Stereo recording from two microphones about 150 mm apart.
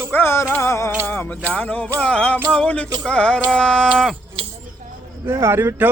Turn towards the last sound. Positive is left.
turn(degrees=-15)  # may be behind; listen again after turning